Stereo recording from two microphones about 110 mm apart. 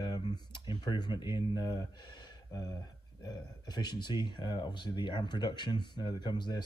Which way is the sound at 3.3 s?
40° left (ahead or behind).